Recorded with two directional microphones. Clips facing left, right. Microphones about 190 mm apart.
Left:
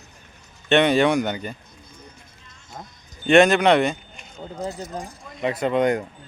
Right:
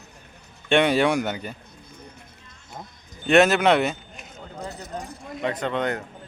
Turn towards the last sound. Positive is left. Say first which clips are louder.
# left 6 dB
turn(degrees=15)  # may be behind; listen again after turning